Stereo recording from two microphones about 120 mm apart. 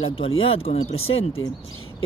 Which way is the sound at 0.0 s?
50° left (ahead or behind).